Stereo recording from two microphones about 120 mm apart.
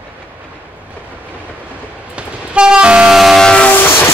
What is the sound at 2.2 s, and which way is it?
Train, 10° right (ahead or behind).